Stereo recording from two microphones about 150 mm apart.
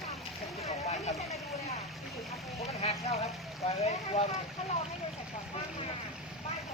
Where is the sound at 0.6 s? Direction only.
45° left (ahead or behind).